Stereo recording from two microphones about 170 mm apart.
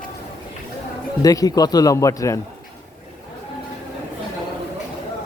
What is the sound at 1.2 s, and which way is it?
A man's voice, 20° left (ahead or behind).